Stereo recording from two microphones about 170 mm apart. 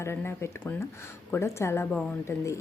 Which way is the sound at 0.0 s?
15° left (ahead or behind).